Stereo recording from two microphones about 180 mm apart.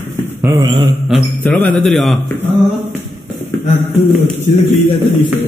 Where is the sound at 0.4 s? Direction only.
15° right (ahead or behind).